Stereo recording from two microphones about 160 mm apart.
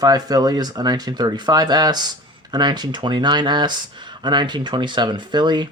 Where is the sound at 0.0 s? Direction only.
25° right (ahead or behind).